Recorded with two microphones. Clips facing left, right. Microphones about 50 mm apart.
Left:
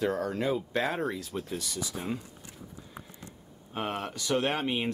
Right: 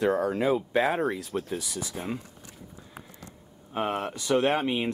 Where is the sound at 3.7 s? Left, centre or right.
Centre.